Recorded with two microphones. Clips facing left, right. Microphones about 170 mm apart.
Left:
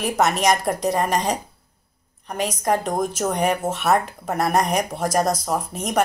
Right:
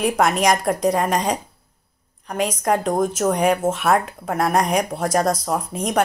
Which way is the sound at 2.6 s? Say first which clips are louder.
Even; 5° left (ahead or behind).